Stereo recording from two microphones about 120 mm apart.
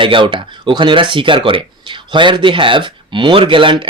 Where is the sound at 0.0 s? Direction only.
45° right (ahead or behind).